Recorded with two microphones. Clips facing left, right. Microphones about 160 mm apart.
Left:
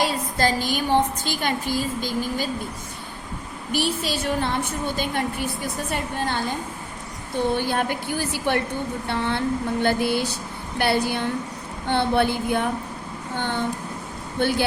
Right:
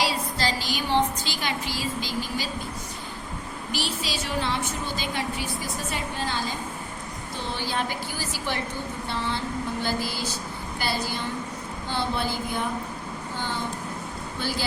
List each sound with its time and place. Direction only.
0.0 s a woman's voice: 50° left (ahead or behind)
3.7 s a woman's voice: 55° left (ahead or behind)
13.3 s a sound: 60° left (ahead or behind)
14.3 s a woman's voice: 60° left (ahead or behind)